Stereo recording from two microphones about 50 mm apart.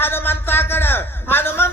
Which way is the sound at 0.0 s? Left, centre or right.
Left.